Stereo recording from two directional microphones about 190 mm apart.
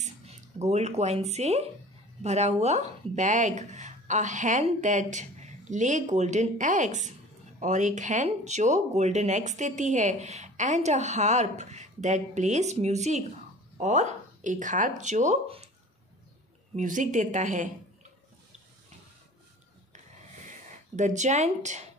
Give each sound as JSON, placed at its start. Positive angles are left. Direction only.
{"t": 0.0, "sound": "speech", "side_deg": -35}
{"t": 16.7, "sound": "speech", "side_deg": -45}
{"t": 20.4, "sound": "speech", "side_deg": -40}